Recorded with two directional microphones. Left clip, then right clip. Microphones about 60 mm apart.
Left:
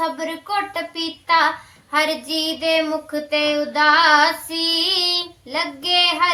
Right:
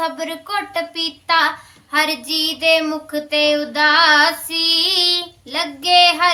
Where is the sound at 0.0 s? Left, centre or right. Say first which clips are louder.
Right 1 dB; left.